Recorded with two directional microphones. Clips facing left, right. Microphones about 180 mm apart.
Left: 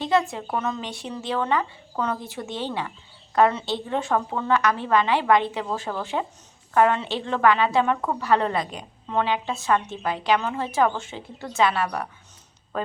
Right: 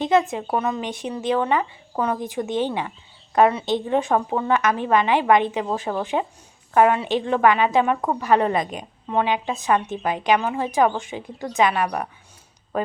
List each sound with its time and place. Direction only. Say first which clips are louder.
0.0 s a woman's voice: right 3 dB; 20° right (ahead or behind)